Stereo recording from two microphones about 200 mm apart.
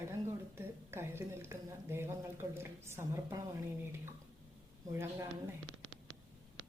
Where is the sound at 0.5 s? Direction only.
10° right (ahead or behind).